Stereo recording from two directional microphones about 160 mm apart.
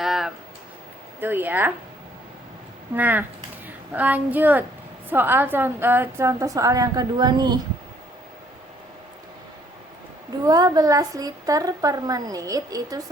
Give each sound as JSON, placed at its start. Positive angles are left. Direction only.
{"t": 0.0, "sound": "a sound", "side_deg": 0}
{"t": 1.2, "sound": "a woman's voice", "side_deg": -15}
{"t": 2.9, "sound": "a woman's voice", "side_deg": -10}
{"t": 10.4, "sound": "a woman's voice", "side_deg": -25}